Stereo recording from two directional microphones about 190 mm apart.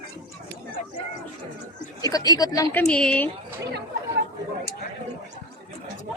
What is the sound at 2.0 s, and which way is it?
Speech, 20° left (ahead or behind).